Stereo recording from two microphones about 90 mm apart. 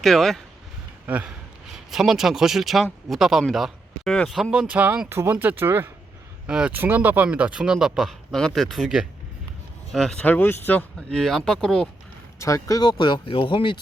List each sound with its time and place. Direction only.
0.0 s speech: 5° left (ahead or behind)
1.0 s speech: 15° right (ahead or behind)
1.9 s speech: 5° right (ahead or behind)
3.5 s a sound: centre (ahead or behind)
4.1 s speech: 10° left (ahead or behind)
4.6 s speech: 15° right (ahead or behind)
6.5 s speech: 10° right (ahead or behind)
6.7 s speech: 20° right (ahead or behind); by 10.2 s 5° left (ahead or behind)
10.2 s speech: 20° left (ahead or behind)
11.1 s speech: 5° left (ahead or behind)
12.4 s speech: 35° left (ahead or behind); by 13.7 s 65° left (ahead or behind)